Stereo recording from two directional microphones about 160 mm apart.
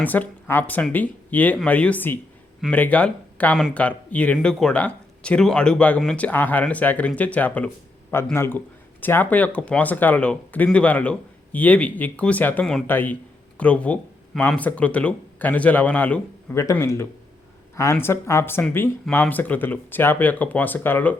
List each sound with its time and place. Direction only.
0.0 s speech: 10° left (ahead or behind)